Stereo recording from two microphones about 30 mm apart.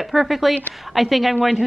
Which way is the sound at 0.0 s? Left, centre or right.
Centre.